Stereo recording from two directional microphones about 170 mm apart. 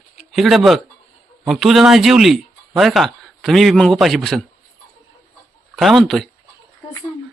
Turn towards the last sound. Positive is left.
turn(degrees=0)  # may be behind; listen again after turning